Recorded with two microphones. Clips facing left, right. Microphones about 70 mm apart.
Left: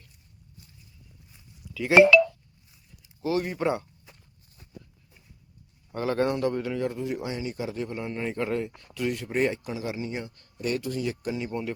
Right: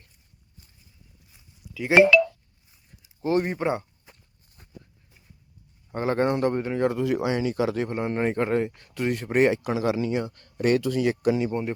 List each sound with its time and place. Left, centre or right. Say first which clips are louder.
1.3 s a sound: left 1 dB; centre
3.2 s speech: right 4 dB; right
3.6 s a sound: right 1 dB; right
5.9 s speech: right 2 dB; right
6.7 s speech: right 6 dB; right
7.9 s a man's voice: right 6 dB; right
10.3 s speech: right 8 dB; right
10.8 s speech: right 6 dB; right
11.1 s speech: right 8 dB; right